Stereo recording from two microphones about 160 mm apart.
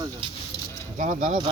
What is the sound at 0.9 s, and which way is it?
Speech, 50° right (ahead or behind).